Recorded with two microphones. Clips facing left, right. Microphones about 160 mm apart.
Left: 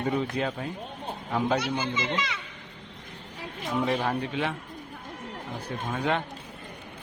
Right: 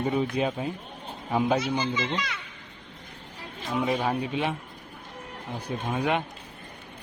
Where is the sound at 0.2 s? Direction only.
15° right (ahead or behind).